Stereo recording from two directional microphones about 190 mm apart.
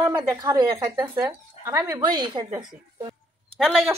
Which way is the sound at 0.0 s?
20° right (ahead or behind).